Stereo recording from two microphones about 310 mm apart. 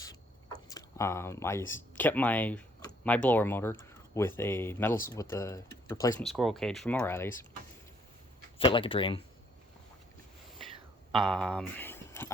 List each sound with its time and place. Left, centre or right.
0.7 s speech: centre
8.5 s speech: centre
11.3 s speech: centre